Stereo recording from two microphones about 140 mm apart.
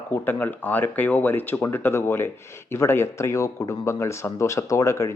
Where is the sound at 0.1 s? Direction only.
15° left (ahead or behind).